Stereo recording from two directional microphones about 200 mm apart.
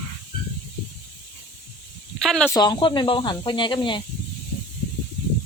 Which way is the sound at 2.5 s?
20° left (ahead or behind).